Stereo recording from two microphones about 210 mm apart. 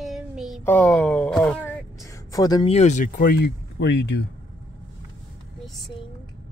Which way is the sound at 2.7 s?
35° left (ahead or behind).